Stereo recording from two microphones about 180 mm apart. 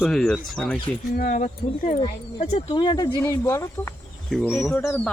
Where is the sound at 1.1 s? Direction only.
45° left (ahead or behind).